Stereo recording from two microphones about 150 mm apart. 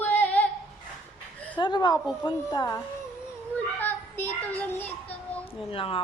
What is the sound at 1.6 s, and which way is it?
Speech, 30° left (ahead or behind).